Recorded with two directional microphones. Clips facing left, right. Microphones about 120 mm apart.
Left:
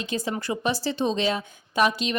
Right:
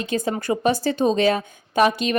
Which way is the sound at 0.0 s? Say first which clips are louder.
Right 5 dB; 50° right (ahead or behind).